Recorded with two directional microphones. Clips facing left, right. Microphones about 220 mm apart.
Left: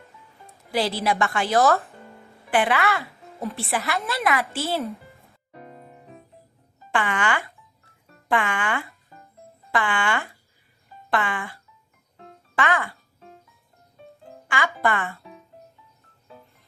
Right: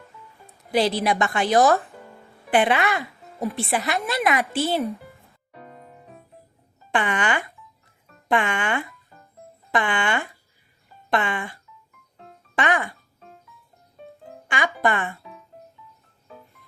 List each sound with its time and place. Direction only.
0.7 s a woman's voice: 20° right (ahead or behind)
6.9 s a woman's voice: 20° right (ahead or behind)
11.1 s music: 20° right (ahead or behind)
14.4 s music: 20° right (ahead or behind)
14.8 s speech: 15° right (ahead or behind)